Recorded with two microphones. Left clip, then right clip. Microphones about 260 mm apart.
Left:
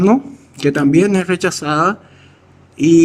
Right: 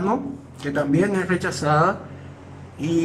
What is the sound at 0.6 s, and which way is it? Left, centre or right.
Speech, left.